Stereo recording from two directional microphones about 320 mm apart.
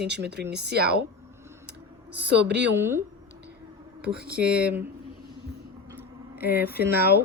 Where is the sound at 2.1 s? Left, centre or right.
Right.